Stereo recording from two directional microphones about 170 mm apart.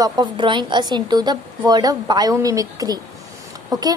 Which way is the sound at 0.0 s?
25° right (ahead or behind).